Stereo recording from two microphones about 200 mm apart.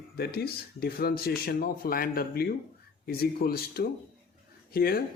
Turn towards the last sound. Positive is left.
turn(degrees=50)  # may be behind; listen again after turning